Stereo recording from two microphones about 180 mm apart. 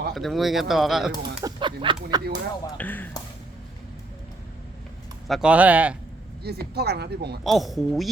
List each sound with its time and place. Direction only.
0.1 s speech: centre (ahead or behind)
1.5 s speech: 25° right (ahead or behind)
2.7 s speech: 10° left (ahead or behind)
5.3 s speech: 5° right (ahead or behind)
6.4 s speech: 60° right (ahead or behind)
7.4 s speech: centre (ahead or behind)